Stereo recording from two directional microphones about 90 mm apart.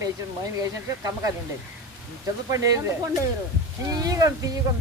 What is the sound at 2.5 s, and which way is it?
Speech, 40° right (ahead or behind).